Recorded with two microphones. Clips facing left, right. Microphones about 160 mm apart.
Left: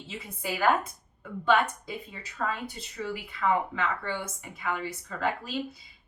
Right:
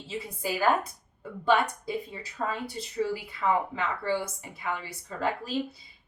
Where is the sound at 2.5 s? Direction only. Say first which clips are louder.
Right 1 dB; 35° right (ahead or behind).